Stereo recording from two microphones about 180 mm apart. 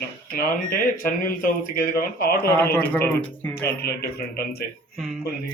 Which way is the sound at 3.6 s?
60° left (ahead or behind).